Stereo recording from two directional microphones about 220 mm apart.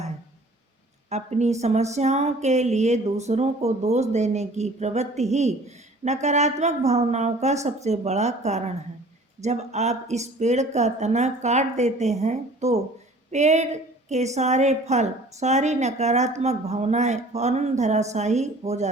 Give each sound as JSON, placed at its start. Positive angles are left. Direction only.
{"t": 1.1, "sound": "a woman's voice", "side_deg": -30}